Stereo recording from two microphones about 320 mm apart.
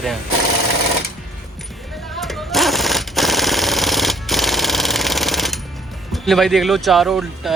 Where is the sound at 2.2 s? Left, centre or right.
Centre.